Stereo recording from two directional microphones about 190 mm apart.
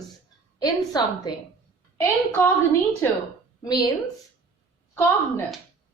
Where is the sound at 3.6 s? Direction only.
20° left (ahead or behind).